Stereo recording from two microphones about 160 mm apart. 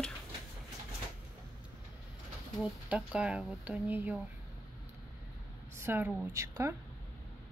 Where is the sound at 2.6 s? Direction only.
5° right (ahead or behind).